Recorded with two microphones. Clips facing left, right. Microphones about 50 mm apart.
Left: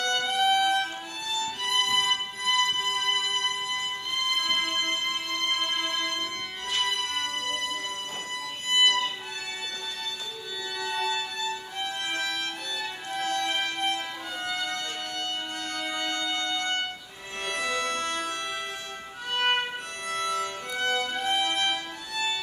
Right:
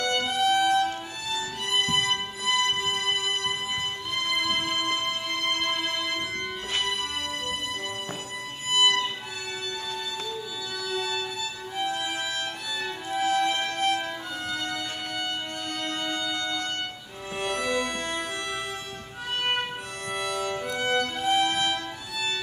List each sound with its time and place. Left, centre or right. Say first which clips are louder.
0.0 s violin: even; centre
1.7 s music: even; centre
8.7 s music: right 1 dB; centre
10.8 s violin: left 1 dB; centre
11.7 s violin: right 2 dB; centre
13.1 s music: right 5 dB; centre
13.5 s music: right 3 dB; centre
16.3 s music: left 1 dB; centre
17.9 s music: left 1 dB; centre
19.3 s violin: left 2 dB; centre
21.6 s music: right 1 dB; centre